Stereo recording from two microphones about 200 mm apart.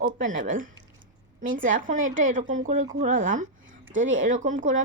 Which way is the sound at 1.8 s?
40° right (ahead or behind).